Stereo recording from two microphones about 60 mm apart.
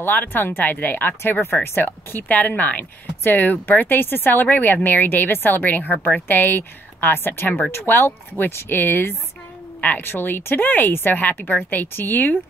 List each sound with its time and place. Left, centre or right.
0.0 s speech: left